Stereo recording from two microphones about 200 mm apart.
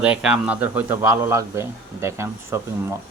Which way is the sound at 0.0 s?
5° right (ahead or behind).